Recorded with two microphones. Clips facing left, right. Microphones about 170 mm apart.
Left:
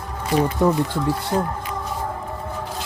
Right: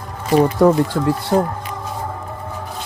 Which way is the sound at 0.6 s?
80° right.